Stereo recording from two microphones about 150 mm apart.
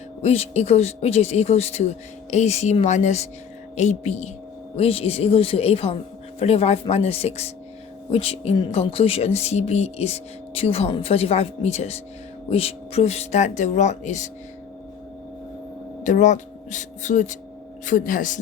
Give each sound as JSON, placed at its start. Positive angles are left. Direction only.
{"t": 0.2, "sound": "speech", "side_deg": 45}
{"t": 16.0, "sound": "speech", "side_deg": 55}